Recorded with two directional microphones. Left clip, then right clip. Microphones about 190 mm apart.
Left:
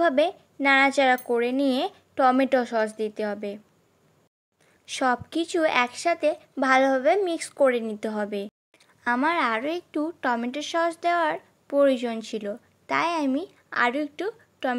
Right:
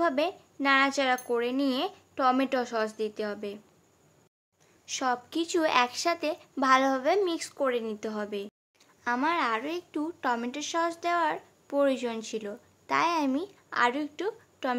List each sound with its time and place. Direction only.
0.0 s speech: 20° left (ahead or behind)
4.8 s speech: 25° left (ahead or behind)